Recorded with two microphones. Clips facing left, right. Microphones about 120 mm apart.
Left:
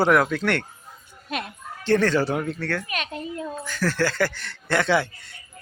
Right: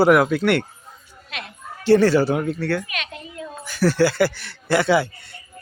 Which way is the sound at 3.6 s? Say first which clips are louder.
Right 7 dB; 10° right (ahead or behind).